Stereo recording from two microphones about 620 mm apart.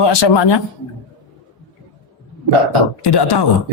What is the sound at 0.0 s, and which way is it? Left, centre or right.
Speech, left.